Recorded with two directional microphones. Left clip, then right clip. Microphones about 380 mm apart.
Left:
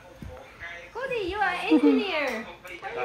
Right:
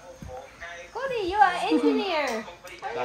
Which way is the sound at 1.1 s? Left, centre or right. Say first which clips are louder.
Right 6 dB; right.